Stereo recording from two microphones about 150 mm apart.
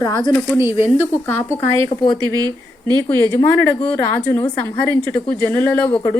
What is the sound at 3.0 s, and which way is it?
A woman's voice, 20° left (ahead or behind).